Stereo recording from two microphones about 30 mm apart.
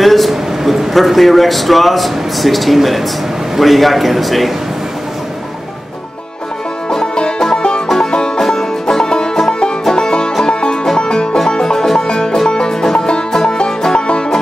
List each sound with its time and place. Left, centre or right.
0.0 s a sound: centre
0.3 s a sound: centre
0.9 s a man's voice: centre
6.9 s music: left
8.4 s music: centre
11.6 s music: centre
13.3 s music: centre